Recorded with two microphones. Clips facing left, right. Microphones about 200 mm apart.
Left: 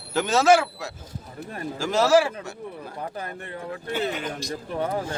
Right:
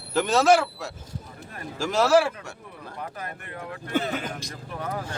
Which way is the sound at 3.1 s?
30° left (ahead or behind).